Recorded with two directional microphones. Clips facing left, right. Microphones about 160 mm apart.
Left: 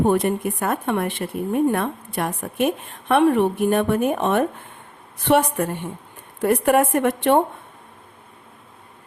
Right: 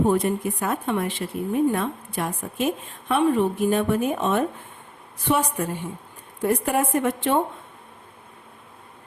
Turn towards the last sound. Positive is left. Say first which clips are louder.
# left 4 dB
turn(degrees=65)  # may be behind; listen again after turning